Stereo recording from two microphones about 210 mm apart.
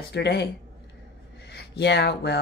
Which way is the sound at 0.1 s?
50° left (ahead or behind).